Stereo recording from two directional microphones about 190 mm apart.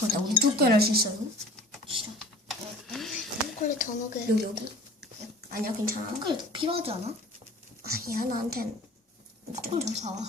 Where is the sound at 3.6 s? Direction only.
40° left (ahead or behind).